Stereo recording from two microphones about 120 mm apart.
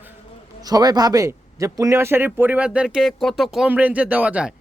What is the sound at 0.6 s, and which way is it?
Speech, 30° right (ahead or behind).